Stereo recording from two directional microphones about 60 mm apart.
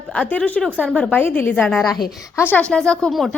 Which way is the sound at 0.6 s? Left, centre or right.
Right.